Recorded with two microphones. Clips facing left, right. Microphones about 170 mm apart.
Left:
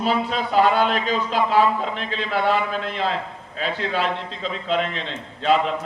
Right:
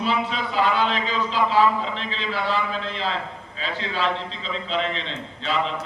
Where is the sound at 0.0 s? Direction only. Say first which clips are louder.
Left 2 dB; 45° left (ahead or behind).